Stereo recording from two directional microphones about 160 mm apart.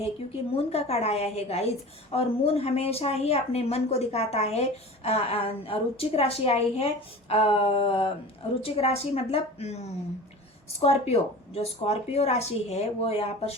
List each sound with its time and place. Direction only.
0.5 s a woman's voice: 40° left (ahead or behind)